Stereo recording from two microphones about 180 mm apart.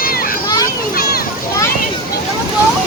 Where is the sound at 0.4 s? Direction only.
20° left (ahead or behind).